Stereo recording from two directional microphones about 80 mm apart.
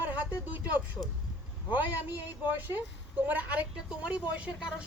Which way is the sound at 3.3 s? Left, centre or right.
Centre.